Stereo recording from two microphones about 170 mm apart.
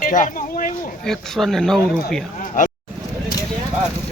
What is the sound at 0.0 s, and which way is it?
Speech, 50° left (ahead or behind).